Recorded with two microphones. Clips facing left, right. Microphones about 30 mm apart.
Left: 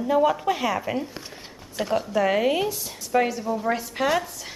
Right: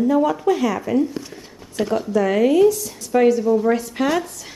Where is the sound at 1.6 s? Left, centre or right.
Centre.